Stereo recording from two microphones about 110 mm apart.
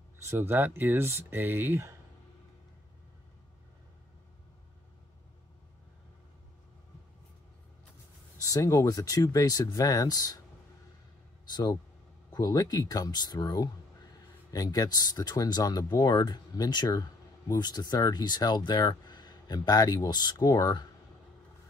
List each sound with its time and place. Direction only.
0.2 s speech: 20° right (ahead or behind)
8.4 s speech: 30° left (ahead or behind)
11.4 s speech: 40° left (ahead or behind)